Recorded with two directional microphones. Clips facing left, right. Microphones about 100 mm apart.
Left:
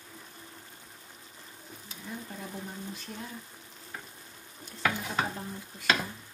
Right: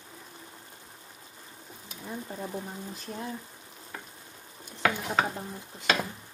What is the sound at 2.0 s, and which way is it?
Speech, 30° right (ahead or behind).